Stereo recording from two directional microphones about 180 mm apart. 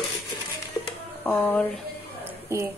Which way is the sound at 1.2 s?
10° left (ahead or behind).